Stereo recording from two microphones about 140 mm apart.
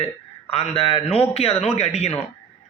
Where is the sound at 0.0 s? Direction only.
45° left (ahead or behind).